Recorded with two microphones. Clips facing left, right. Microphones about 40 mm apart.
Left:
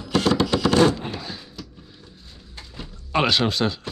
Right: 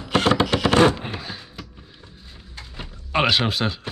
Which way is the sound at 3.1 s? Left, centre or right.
Centre.